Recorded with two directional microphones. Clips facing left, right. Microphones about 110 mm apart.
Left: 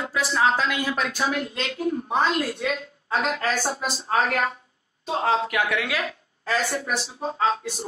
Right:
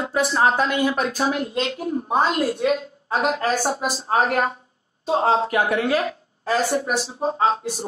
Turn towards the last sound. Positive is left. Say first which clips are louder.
# right 3 dB
turn(degrees=-35)  # may be behind; listen again after turning